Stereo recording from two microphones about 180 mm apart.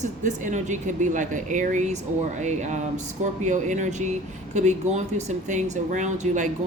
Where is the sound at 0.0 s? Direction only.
45° right (ahead or behind).